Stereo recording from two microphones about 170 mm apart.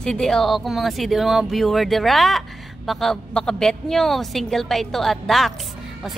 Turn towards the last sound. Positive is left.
turn(degrees=0)  # may be behind; listen again after turning